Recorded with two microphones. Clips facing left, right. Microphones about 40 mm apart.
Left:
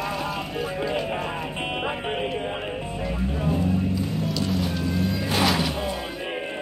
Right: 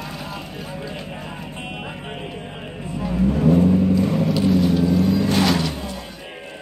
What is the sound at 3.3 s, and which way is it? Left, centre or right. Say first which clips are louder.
Vehicle: right 8 dB; right.